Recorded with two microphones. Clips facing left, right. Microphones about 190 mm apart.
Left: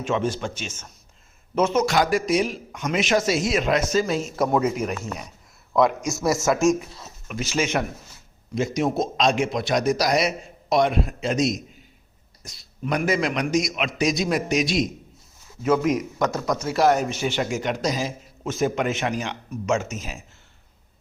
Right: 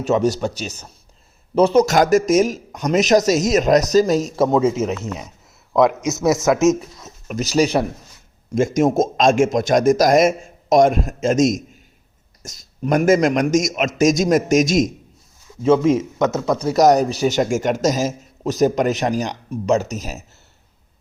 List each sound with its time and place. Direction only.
0.0 s a man's voice: 40° right (ahead or behind)
4.4 s speech: 25° right (ahead or behind)
6.1 s speech: 20° right (ahead or behind)
7.3 s a man's voice: 40° right (ahead or behind)
8.4 s a man's voice: 50° right (ahead or behind)
15.6 s speech: 25° right (ahead or behind)
16.6 s a man's voice: 40° right (ahead or behind)